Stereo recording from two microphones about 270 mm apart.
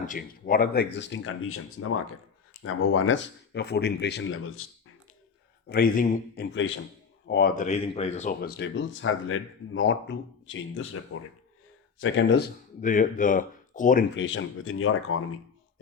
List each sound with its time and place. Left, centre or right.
0.0 s speech: left
5.6 s speech: left
12.8 s speech: left
14.2 s speech: left